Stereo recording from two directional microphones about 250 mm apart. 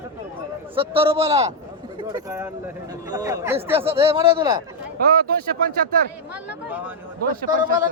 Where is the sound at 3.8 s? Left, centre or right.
Right.